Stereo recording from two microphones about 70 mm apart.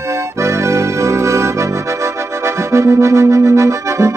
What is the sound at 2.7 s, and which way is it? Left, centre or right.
Music, right.